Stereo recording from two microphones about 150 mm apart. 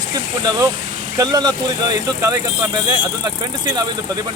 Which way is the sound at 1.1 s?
30° right (ahead or behind).